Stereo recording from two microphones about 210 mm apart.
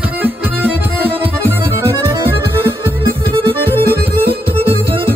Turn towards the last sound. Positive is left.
turn(degrees=-25)  # may be behind; listen again after turning